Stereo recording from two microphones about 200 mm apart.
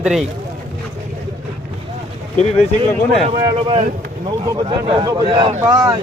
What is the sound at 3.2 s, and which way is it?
Speech, 30° right (ahead or behind).